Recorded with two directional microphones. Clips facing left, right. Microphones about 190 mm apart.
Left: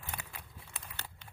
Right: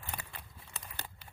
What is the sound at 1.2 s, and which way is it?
Crumpling, 5° right (ahead or behind).